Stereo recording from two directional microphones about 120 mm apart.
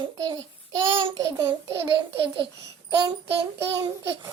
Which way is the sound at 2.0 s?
45° right (ahead or behind).